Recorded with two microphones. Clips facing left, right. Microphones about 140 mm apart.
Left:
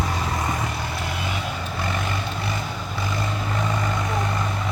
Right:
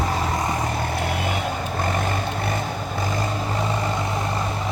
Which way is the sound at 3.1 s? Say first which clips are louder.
Even; 30° right (ahead or behind).